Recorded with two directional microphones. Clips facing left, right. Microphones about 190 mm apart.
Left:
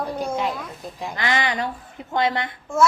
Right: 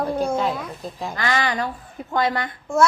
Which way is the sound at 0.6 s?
Centre (ahead or behind).